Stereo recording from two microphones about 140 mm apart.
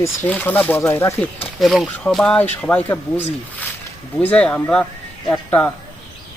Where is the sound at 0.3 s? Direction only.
10° left (ahead or behind).